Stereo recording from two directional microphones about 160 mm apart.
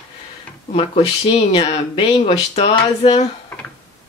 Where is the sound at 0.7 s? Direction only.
40° left (ahead or behind).